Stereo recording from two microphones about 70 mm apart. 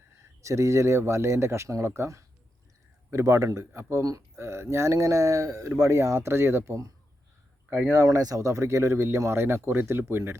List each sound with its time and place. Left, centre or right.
0.2 s speech: right
7.7 s speech: right
8.0 s speech: right